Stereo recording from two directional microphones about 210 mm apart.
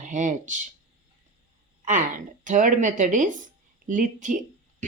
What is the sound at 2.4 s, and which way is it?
Speech, 35° right (ahead or behind).